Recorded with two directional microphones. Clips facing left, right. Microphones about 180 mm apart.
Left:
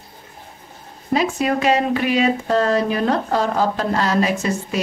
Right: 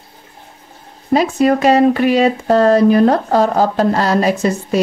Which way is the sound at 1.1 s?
40° right (ahead or behind).